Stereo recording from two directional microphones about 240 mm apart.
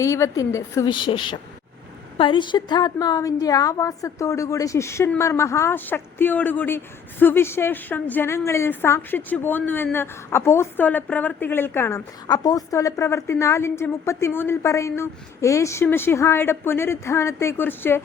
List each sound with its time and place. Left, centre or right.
0.0 s a woman's voice: centre